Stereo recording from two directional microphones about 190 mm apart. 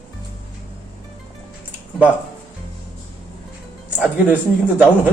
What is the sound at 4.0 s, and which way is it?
Speech, 10° right (ahead or behind).